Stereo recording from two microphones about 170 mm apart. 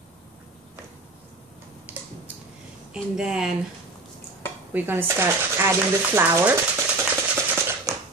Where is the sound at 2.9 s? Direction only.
5° right (ahead or behind).